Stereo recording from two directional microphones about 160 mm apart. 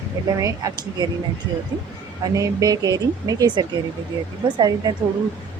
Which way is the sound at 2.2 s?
20° right (ahead or behind).